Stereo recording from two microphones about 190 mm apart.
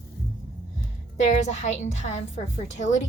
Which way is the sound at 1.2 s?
40° left (ahead or behind).